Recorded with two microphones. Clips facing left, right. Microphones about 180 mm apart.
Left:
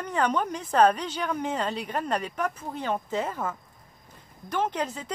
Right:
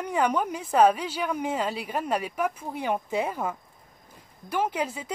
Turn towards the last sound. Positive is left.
turn(degrees=-10)  # may be behind; listen again after turning